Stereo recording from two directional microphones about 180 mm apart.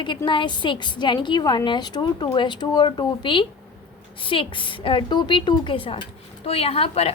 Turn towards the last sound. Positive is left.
turn(degrees=35)  # may be behind; listen again after turning